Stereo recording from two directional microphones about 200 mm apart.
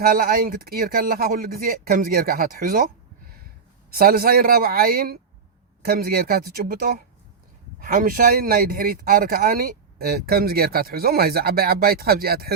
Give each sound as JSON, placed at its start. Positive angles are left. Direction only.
{"t": 0.0, "sound": "speech", "side_deg": -45}
{"t": 3.9, "sound": "speech", "side_deg": -50}